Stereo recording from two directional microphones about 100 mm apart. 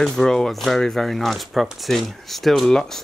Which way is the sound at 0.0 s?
5° left (ahead or behind).